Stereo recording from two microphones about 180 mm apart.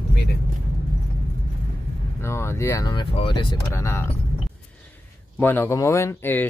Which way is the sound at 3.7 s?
15° left (ahead or behind).